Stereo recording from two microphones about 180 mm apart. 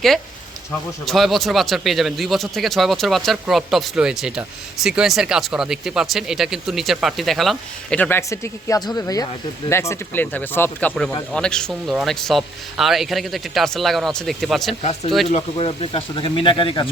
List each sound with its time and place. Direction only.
1.0 s speech: centre (ahead or behind)
15.3 s speech: 35° left (ahead or behind)